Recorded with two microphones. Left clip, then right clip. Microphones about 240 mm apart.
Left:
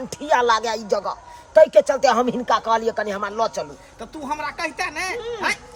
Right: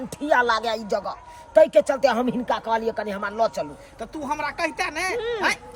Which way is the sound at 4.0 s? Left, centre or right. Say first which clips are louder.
Even; centre.